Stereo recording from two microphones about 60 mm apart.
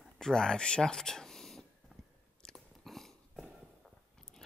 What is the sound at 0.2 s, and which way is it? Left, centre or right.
Speech, centre.